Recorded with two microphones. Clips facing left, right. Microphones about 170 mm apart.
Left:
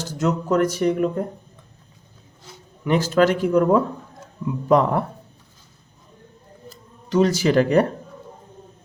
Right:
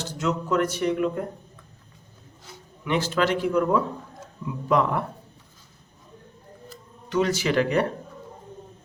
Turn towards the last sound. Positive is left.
turn(degrees=40)  # may be behind; listen again after turning